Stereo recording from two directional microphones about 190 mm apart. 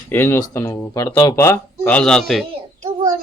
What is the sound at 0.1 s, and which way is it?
A man's voice, 10° left (ahead or behind).